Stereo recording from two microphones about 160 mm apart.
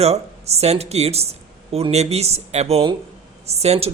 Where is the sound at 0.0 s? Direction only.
40° right (ahead or behind).